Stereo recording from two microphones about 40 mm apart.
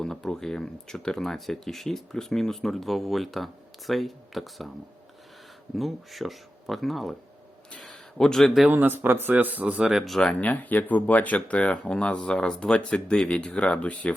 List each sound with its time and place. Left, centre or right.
0.0 s speech: centre
5.7 s speech: centre
7.9 s a sound: centre
8.7 s a man's voice: right
9.4 s speech: right
10.2 s speech: centre
10.5 s speech: left